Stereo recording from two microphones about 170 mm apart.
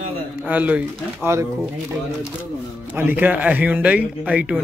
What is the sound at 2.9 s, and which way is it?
Speech, 10° right (ahead or behind).